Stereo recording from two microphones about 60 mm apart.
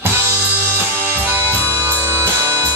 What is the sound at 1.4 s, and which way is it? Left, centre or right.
Music, left.